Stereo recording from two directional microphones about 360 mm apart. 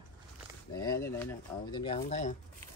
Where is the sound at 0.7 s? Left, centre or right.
Centre.